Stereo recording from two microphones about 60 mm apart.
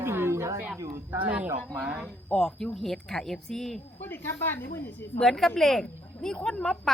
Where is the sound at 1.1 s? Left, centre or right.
Right.